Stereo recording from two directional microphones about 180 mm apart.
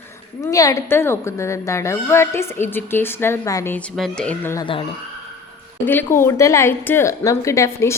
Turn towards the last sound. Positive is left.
turn(degrees=15)  # may be behind; listen again after turning